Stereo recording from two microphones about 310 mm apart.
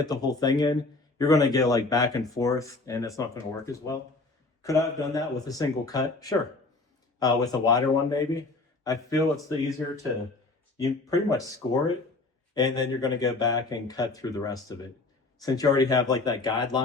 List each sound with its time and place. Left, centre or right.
0.0 s speech: centre